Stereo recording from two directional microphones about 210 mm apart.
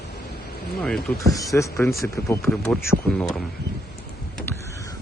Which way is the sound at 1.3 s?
15° left (ahead or behind).